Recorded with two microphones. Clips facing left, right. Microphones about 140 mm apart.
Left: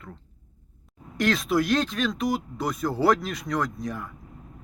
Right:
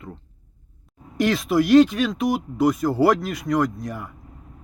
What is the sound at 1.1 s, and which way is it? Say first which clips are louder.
A man's voice: right 4 dB; 10° right (ahead or behind).